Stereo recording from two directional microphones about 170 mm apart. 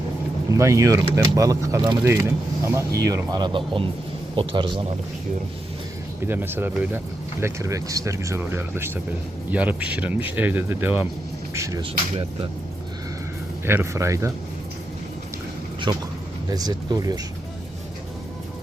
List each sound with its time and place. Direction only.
0.5 s speech: 20° right (ahead or behind)
6.2 s speech: 10° right (ahead or behind)
11.8 s speech: 30° right (ahead or behind)
13.7 s speech: 15° right (ahead or behind)
15.9 s speech: 25° right (ahead or behind)